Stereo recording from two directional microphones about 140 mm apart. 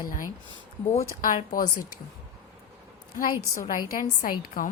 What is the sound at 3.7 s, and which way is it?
A woman's voice, 75° left (ahead or behind).